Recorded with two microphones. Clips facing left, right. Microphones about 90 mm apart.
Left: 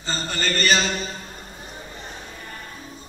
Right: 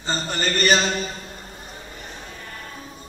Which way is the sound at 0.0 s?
20° right (ahead or behind).